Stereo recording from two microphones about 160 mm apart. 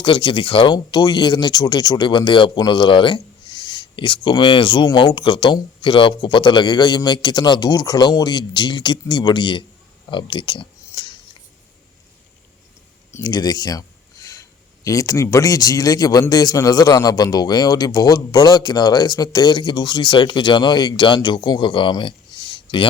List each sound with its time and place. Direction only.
0.0 s speech: 30° left (ahead or behind)
13.1 s a sound: 20° left (ahead or behind)
14.8 s speech: 20° left (ahead or behind)